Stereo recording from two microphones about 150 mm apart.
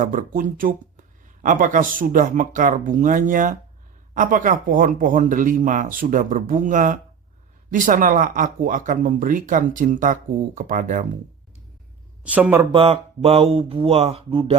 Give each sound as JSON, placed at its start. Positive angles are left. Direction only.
{"t": 0.0, "sound": "speech", "side_deg": -60}
{"t": 12.2, "sound": "speech", "side_deg": -10}
{"t": 12.7, "sound": "speech", "side_deg": -40}